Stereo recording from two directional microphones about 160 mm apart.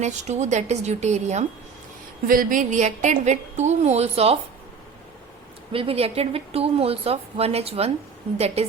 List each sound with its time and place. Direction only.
0.0 s a woman's voice: 45° right (ahead or behind)
2.2 s a woman's voice: 60° right (ahead or behind); by 4.4 s 40° right (ahead or behind)
5.7 s a woman's voice: 35° right (ahead or behind)